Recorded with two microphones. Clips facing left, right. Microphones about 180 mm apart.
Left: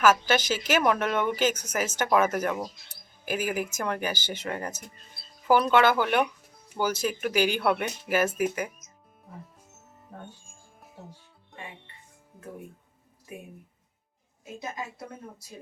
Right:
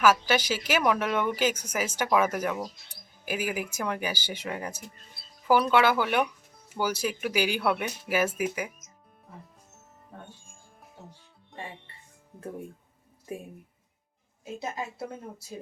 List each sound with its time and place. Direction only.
0.0 s speech: 10° right (ahead or behind)
14.6 s speech: 25° right (ahead or behind)